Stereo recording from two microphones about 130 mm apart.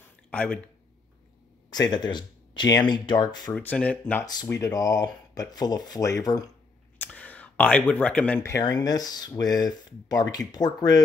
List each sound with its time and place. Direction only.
0.0 s a sound: 10° left (ahead or behind)
1.7 s speech: 30° left (ahead or behind)
3.5 s speech: 10° left (ahead or behind)
4.5 s speech: 25° left (ahead or behind)
7.0 s speech: 10° left (ahead or behind)
8.4 s speech: 25° left (ahead or behind)